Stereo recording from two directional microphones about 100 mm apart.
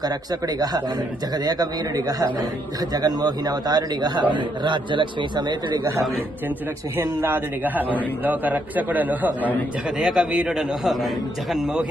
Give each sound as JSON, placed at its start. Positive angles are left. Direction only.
{"t": 0.0, "sound": "a man's voice", "side_deg": -40}
{"t": 7.0, "sound": "a man's voice", "side_deg": -25}
{"t": 10.0, "sound": "a man's voice", "side_deg": -5}